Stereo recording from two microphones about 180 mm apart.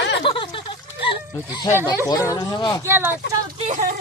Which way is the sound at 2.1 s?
20° left (ahead or behind).